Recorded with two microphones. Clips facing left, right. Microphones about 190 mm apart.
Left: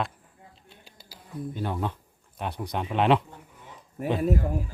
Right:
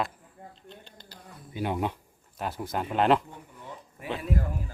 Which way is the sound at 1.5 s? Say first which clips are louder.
Right 3 dB; 15° right (ahead or behind).